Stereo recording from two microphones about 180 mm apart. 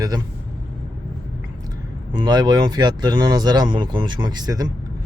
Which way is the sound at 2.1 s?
25° right (ahead or behind).